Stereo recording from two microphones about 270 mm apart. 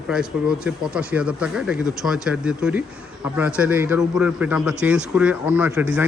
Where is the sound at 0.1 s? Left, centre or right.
Centre.